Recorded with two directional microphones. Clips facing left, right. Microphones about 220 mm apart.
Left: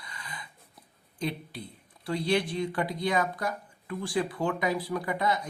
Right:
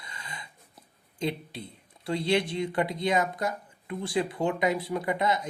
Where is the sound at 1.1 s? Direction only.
25° right (ahead or behind).